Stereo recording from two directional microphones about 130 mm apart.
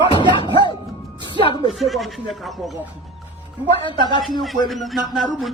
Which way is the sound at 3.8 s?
40° left (ahead or behind).